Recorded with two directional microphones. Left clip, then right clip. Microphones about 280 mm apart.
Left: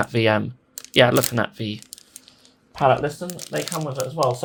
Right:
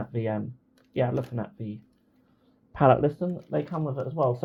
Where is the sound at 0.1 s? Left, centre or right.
Left.